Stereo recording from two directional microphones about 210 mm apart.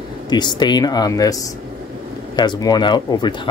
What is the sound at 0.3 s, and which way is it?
Speech, 20° left (ahead or behind).